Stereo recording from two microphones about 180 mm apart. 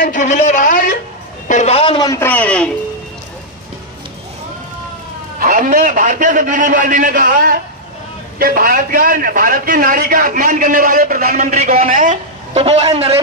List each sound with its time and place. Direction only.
0.0 s a woman's voice: 45° left (ahead or behind)
1.5 s a man's voice: 40° left (ahead or behind); by 2.7 s 5° left (ahead or behind)
5.4 s a man's voice: 50° right (ahead or behind)
12.5 s a man's voice: 35° right (ahead or behind)